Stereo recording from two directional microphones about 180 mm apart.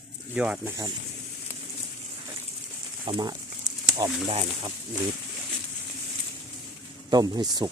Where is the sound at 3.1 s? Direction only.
25° right (ahead or behind).